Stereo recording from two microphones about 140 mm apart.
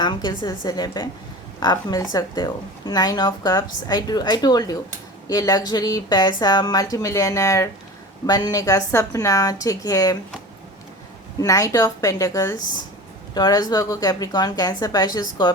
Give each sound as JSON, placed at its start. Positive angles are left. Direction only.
{"t": 0.0, "sound": "a woman's voice", "side_deg": 30}
{"t": 11.3, "sound": "a woman's voice", "side_deg": 25}